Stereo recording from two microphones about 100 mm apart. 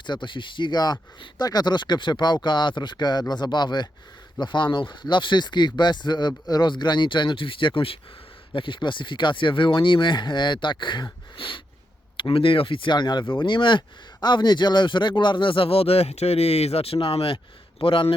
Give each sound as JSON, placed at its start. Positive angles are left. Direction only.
{"t": 0.0, "sound": "speech", "side_deg": 50}